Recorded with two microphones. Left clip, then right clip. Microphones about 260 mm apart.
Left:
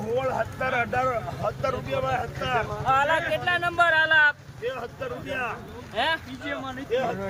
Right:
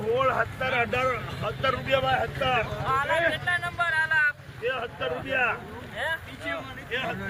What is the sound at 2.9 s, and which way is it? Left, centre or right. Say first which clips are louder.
Speech: left 3 dB; left.